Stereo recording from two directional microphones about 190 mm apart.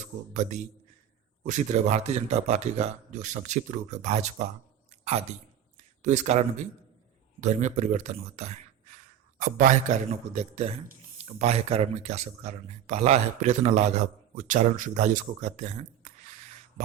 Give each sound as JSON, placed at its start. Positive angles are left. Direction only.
{"t": 0.0, "sound": "speech", "side_deg": -40}
{"t": 4.9, "sound": "a sound", "side_deg": -35}
{"t": 6.0, "sound": "speech", "side_deg": -40}